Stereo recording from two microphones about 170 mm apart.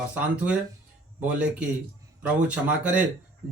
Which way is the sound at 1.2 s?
5° right (ahead or behind).